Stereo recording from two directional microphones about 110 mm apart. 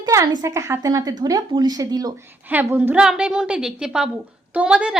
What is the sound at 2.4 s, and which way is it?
A woman's voice, 15° right (ahead or behind).